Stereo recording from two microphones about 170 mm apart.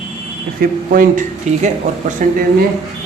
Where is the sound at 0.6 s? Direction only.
55° right (ahead or behind).